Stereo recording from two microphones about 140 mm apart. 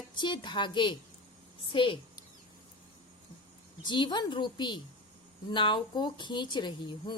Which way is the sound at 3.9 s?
35° left (ahead or behind).